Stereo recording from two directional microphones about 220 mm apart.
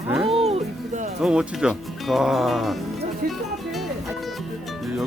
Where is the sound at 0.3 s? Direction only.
30° right (ahead or behind).